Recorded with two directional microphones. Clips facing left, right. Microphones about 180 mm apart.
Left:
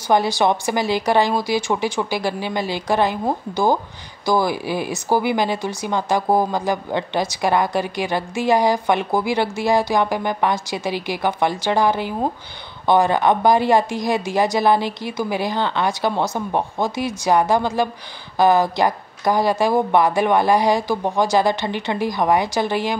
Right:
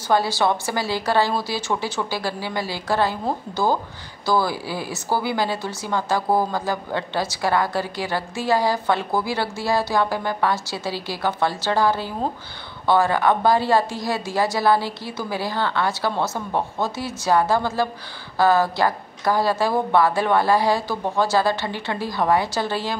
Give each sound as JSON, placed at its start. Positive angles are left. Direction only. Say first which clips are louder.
{"t": 0.1, "sound": "speech", "louder": "left 3 dB", "side_deg": 15}